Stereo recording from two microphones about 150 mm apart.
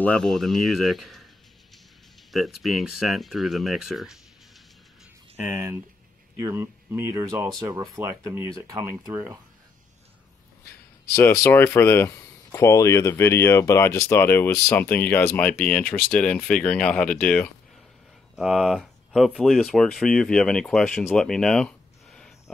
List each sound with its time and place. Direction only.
0.0 s speech: 5° left (ahead or behind)
2.3 s speech: centre (ahead or behind)
5.3 s speech: 15° right (ahead or behind)
11.1 s speech: 20° left (ahead or behind)
21.1 s a sound: 5° left (ahead or behind)